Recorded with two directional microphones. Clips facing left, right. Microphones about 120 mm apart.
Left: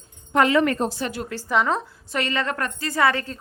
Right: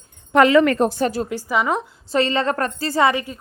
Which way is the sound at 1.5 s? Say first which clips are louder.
Even; 5° right (ahead or behind).